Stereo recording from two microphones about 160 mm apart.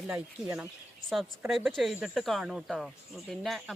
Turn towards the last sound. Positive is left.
turn(degrees=0)  # may be behind; listen again after turning